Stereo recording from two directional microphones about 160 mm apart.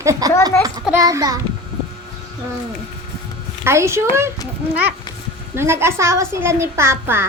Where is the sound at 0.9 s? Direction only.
20° right (ahead or behind).